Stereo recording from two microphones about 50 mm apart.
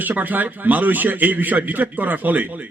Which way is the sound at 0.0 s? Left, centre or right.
Right.